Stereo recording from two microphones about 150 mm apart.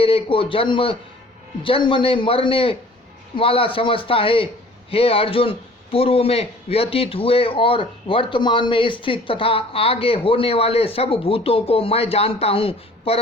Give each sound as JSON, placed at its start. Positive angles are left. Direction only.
{"t": 0.0, "sound": "a man's voice", "side_deg": 40}